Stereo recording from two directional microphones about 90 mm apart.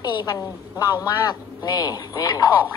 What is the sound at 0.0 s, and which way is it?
A woman's voice, 55° left (ahead or behind).